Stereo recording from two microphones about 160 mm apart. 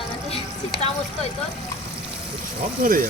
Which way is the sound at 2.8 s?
60° right (ahead or behind).